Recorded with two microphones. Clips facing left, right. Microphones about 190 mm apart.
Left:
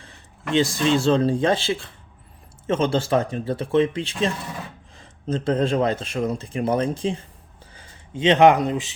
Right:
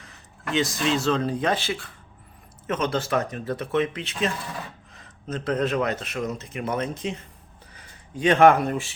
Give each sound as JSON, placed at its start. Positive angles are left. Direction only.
{"t": 0.5, "sound": "speech", "side_deg": 30}